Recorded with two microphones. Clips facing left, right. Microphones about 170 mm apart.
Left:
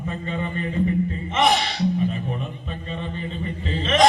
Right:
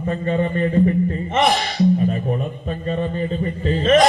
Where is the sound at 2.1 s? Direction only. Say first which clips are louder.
Right 6 dB; 45° right (ahead or behind).